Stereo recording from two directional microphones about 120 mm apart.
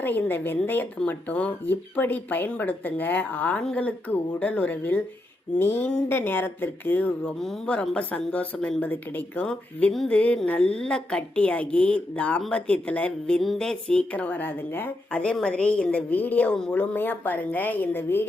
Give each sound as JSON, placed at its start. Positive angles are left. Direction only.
{"t": 0.0, "sound": "a woman's voice", "side_deg": 15}
{"t": 7.3, "sound": "a woman's voice", "side_deg": 5}